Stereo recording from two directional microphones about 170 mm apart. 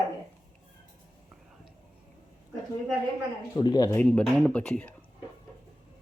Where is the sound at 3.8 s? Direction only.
5° left (ahead or behind).